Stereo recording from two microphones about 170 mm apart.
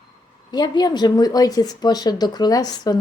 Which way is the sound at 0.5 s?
25° left (ahead or behind).